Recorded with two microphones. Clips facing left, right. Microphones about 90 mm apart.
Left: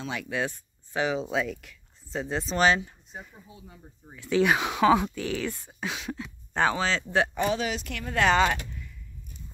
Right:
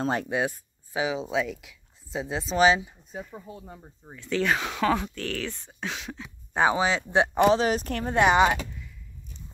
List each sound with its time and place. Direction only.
0.0 s speech: 40° right (ahead or behind)
0.3 s speech: 10° right (ahead or behind)
3.5 s speech: 45° right (ahead or behind)
4.2 s speech: 10° left (ahead or behind)
6.5 s speech: 15° right (ahead or behind)
7.5 s speech: 40° right (ahead or behind)
8.2 s speech: 15° right (ahead or behind)